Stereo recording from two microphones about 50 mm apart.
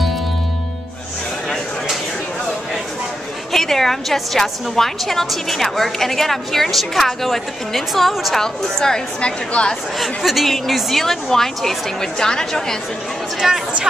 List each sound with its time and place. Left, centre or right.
3.5 s a woman's voice: centre
8.4 s a woman's voice: centre
9.9 s a woman's voice: centre
13.4 s a woman's voice: centre